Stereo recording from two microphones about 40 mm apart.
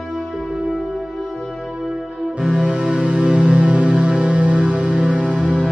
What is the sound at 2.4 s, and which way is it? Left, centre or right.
Music, right.